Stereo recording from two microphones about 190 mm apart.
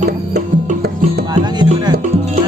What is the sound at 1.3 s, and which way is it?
Music, 20° right (ahead or behind).